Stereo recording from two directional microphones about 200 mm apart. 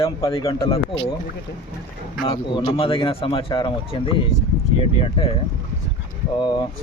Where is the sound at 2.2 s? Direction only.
25° left (ahead or behind).